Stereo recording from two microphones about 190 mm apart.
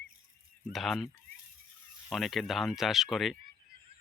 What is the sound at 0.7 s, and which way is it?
Speech, centre (ahead or behind).